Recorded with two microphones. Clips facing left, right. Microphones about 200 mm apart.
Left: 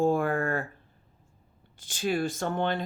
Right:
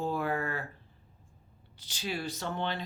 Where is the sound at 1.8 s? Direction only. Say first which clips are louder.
Left 8 dB; 50° left (ahead or behind).